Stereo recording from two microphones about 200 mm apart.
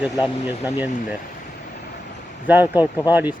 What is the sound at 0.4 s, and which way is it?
Speech, 10° right (ahead or behind).